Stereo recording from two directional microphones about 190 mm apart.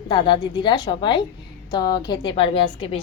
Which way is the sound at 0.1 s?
25° left (ahead or behind).